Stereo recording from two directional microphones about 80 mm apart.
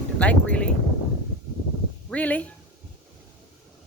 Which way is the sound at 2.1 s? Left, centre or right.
Centre.